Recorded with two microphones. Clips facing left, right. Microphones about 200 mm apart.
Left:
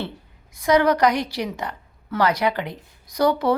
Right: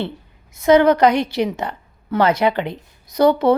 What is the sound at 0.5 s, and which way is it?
A woman's voice, 25° right (ahead or behind).